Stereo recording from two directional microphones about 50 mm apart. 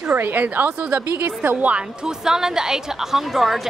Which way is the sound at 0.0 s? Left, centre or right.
Right.